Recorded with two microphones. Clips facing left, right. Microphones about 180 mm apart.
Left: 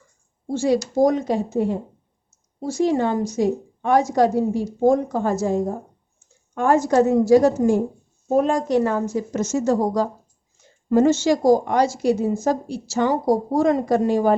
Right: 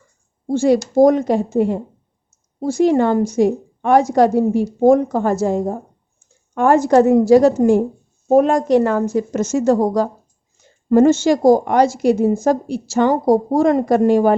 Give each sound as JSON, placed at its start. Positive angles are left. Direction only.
{"t": 0.5, "sound": "speech", "side_deg": -55}
{"t": 2.7, "sound": "speech", "side_deg": -60}